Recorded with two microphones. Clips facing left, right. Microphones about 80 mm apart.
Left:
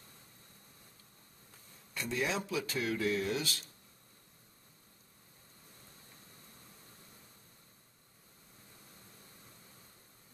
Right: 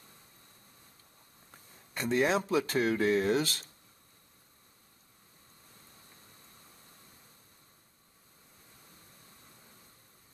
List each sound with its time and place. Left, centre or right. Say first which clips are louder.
2.0 s speech: right 7 dB; right